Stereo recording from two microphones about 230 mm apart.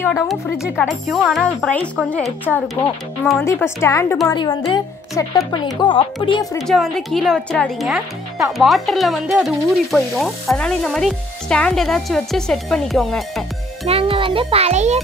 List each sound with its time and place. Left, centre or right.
0.0 s a child's voice: centre; by 6.6 s left
6.6 s speech: centre
13.8 s a child's voice: right